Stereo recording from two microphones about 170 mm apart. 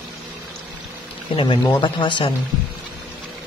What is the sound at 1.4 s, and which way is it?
Speech, 30° left (ahead or behind).